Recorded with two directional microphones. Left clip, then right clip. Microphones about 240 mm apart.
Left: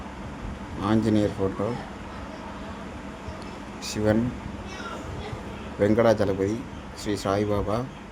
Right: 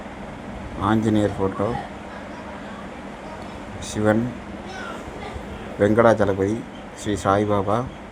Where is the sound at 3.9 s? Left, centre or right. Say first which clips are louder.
Right 4 dB; centre.